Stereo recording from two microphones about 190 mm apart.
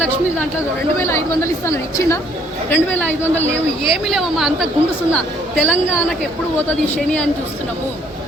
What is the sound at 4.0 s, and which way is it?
Speech, centre (ahead or behind).